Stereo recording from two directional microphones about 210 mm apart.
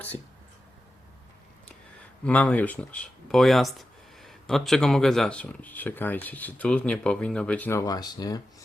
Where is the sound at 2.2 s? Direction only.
5° left (ahead or behind).